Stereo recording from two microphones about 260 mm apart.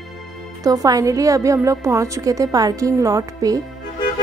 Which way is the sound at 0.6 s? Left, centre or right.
Centre.